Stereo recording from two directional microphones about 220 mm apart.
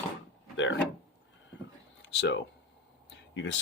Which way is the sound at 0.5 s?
60° left (ahead or behind).